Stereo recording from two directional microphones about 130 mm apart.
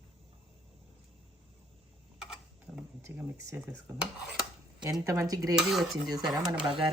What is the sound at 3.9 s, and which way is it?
Stir, 20° right (ahead or behind).